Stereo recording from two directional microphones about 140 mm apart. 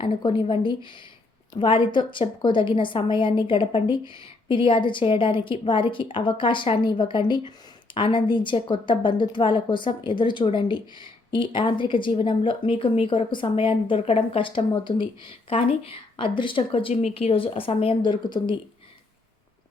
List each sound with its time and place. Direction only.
0.0 s a woman's voice: 35° left (ahead or behind)
16.9 s a woman's voice: 50° left (ahead or behind); by 18.5 s 35° left (ahead or behind)